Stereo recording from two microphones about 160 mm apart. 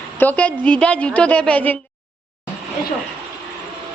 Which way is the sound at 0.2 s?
10° left (ahead or behind).